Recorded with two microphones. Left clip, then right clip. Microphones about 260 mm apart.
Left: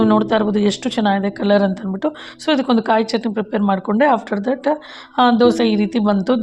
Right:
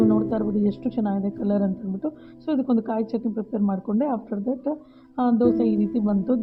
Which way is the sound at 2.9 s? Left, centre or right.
Left.